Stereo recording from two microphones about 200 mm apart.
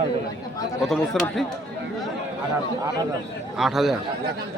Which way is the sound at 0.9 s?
Centre (ahead or behind).